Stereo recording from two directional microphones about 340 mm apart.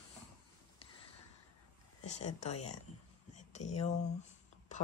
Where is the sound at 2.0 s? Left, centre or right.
Centre.